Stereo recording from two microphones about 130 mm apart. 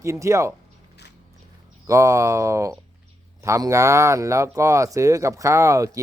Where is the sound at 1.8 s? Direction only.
25° right (ahead or behind).